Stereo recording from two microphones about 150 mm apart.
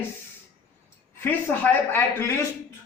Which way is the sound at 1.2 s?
15° left (ahead or behind).